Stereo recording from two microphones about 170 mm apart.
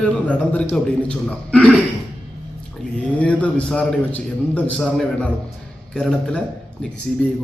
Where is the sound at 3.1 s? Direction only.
5° left (ahead or behind).